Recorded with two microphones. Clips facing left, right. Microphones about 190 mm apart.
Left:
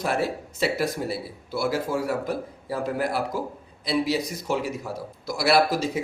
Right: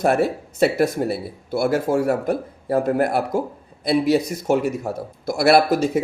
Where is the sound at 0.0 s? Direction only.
55° right (ahead or behind).